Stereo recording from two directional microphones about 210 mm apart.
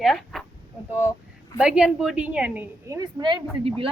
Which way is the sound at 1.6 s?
5° right (ahead or behind).